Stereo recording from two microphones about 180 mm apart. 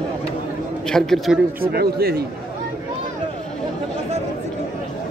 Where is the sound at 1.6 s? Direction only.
60° right (ahead or behind).